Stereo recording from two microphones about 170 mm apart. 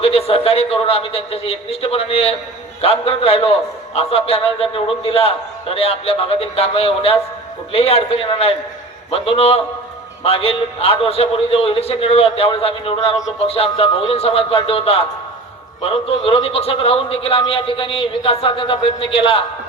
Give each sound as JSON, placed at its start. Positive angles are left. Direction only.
{"t": 0.0, "sound": "a man's voice", "side_deg": 35}